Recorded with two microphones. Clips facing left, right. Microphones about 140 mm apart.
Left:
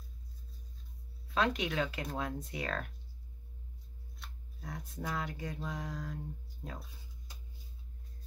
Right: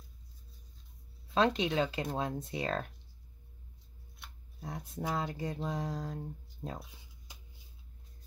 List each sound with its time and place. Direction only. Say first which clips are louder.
1.3 s speech: right 4 dB; 25° right (ahead or behind)
4.6 s speech: right 3 dB; 25° right (ahead or behind)